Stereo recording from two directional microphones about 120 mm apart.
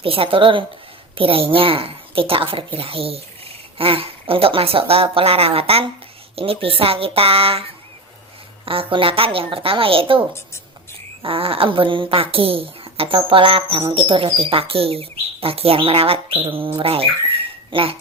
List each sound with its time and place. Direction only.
0.0 s speech: 50° right (ahead or behind)